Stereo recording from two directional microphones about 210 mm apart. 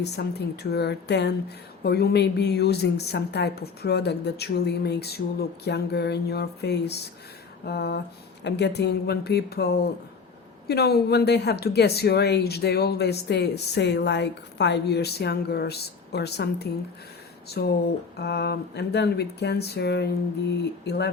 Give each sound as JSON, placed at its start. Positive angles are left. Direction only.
{"t": 0.0, "sound": "speech", "side_deg": 50}